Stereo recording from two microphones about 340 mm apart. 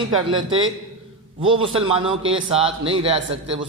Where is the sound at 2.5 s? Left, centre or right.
Centre.